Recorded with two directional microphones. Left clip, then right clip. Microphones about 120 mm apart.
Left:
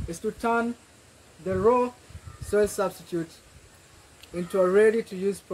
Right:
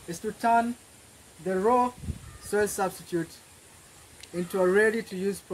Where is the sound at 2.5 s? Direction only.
35° right (ahead or behind).